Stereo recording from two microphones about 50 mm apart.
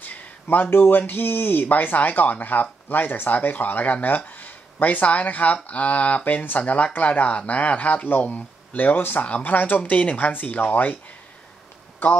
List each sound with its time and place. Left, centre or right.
0.0 s a sound: left
0.7 s speech: left
9.9 s speech: left